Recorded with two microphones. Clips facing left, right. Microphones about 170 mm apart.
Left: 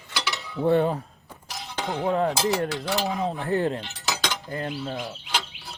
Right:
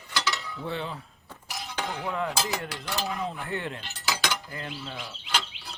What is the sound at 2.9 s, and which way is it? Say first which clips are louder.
Speech: left 3 dB; 20° left (ahead or behind).